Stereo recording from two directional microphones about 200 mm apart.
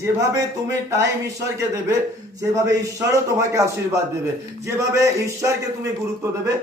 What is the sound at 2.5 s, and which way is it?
A man's voice, 15° right (ahead or behind).